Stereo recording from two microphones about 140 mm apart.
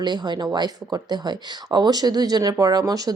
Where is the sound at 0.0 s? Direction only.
30° right (ahead or behind).